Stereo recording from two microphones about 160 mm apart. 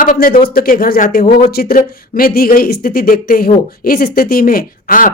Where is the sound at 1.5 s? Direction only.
75° left (ahead or behind).